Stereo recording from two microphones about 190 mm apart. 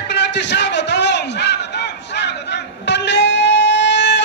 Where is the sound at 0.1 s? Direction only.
65° left (ahead or behind).